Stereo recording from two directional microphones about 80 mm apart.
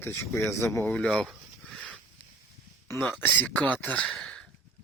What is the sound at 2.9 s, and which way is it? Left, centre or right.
Speech, left.